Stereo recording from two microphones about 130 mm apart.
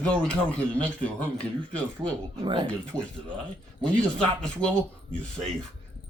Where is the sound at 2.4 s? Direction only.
40° right (ahead or behind).